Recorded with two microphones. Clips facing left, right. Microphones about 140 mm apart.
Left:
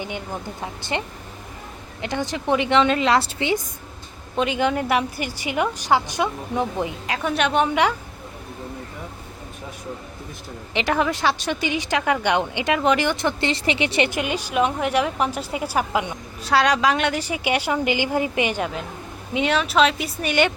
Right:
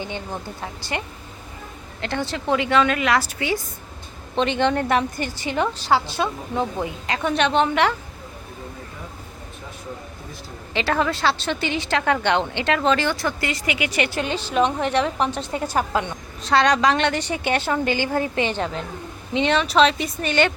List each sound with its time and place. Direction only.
0.9 s a woman's voice: 25° left (ahead or behind)
4.4 s speech: 5° left (ahead or behind)
7.1 s speech: 5° left (ahead or behind)
10.8 s speech: 15° left (ahead or behind)